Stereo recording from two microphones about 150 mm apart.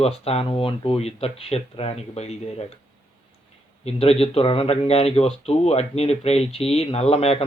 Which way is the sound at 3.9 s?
45° left (ahead or behind).